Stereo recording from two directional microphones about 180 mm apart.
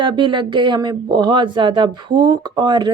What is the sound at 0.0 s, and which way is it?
Speech, 25° right (ahead or behind).